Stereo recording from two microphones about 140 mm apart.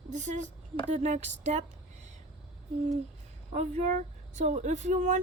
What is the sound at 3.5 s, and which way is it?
Speech, 55° right (ahead or behind).